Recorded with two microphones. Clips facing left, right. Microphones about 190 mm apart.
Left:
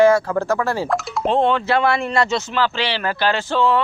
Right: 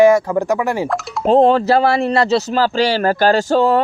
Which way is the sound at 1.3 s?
40° right (ahead or behind).